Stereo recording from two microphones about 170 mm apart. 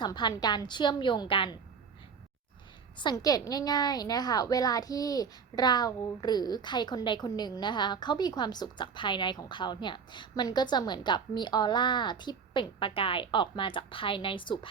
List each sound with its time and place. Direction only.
0.0 s a woman's voice: 25° left (ahead or behind)
2.9 s a woman's voice: 25° left (ahead or behind)